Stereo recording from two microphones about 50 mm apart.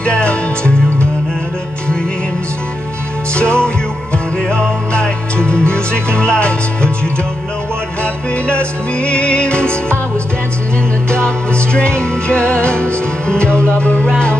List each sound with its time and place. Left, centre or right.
0.0 s music: left
3.3 s music: left
8.0 s music: left
11.1 s music: left